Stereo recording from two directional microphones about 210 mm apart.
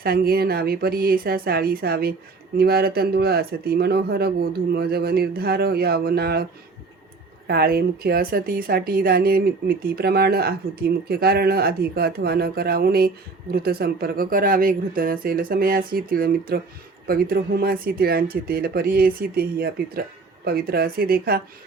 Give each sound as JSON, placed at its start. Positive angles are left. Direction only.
{"t": 0.0, "sound": "a woman's voice", "side_deg": -45}